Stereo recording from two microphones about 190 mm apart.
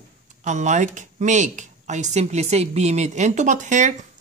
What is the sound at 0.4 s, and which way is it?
Speech, 40° right (ahead or behind).